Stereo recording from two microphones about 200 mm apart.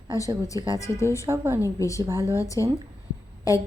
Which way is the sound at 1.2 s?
15° right (ahead or behind).